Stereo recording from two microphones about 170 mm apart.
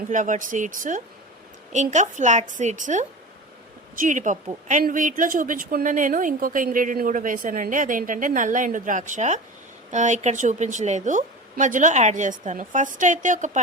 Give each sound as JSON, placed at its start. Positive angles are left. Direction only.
{"t": 0.1, "sound": "a woman's voice", "side_deg": -50}